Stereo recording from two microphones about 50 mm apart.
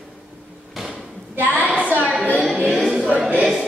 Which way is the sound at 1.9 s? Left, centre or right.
Right.